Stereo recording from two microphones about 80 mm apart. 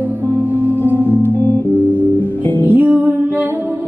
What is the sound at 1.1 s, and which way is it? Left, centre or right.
Music, left.